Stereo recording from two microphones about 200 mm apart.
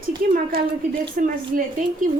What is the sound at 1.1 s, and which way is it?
Speech, 40° right (ahead or behind).